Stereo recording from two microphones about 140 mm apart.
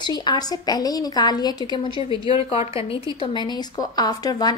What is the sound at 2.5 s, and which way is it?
A woman's voice, 45° left (ahead or behind).